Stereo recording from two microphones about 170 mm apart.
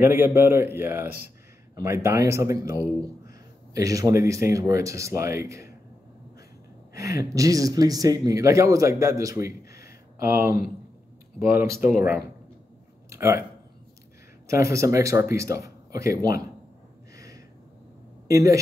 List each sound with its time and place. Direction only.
0.0 s a man's voice: 10° right (ahead or behind)
6.9 s a man's voice: 20° right (ahead or behind)
14.5 s a man's voice: 20° right (ahead or behind)
18.3 s speech: 20° right (ahead or behind)